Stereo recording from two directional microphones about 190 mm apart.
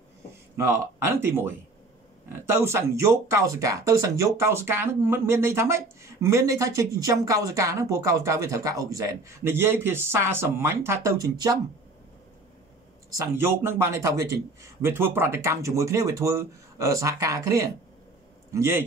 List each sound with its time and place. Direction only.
0.6 s speech: 15° right (ahead or behind)
13.1 s speech: 10° right (ahead or behind)